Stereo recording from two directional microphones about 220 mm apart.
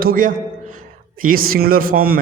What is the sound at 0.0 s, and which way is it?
A man's voice, 40° right (ahead or behind).